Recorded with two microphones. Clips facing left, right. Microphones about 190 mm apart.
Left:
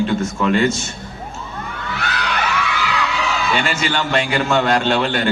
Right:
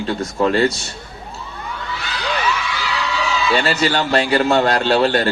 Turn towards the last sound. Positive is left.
turn(degrees=-35)  # may be behind; listen again after turning